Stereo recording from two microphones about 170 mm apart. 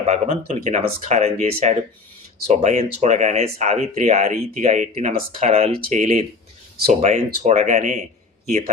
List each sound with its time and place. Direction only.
0.0 s speech: 40° right (ahead or behind)